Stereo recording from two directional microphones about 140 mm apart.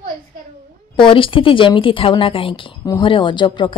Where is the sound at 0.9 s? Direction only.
35° left (ahead or behind).